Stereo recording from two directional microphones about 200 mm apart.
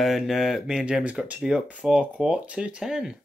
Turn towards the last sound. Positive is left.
turn(degrees=-5)  # may be behind; listen again after turning